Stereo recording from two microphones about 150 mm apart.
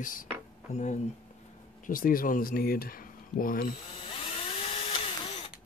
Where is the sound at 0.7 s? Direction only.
50° left (ahead or behind).